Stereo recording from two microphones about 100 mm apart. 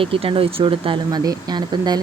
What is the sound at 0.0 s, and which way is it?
Speech, 65° right (ahead or behind).